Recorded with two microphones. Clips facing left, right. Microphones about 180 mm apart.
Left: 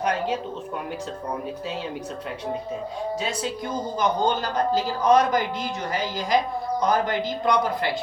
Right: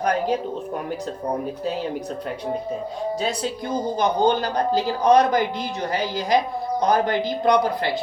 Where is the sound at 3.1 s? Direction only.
35° right (ahead or behind).